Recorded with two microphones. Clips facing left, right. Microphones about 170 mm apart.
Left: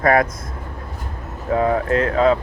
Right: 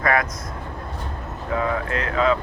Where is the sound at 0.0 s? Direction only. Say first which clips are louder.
Left 5 dB; 50° left (ahead or behind).